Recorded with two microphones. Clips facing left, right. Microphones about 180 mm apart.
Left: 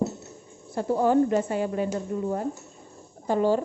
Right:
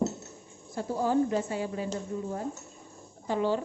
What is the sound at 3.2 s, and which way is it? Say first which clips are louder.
Speech: left 5 dB; 45° left (ahead or behind).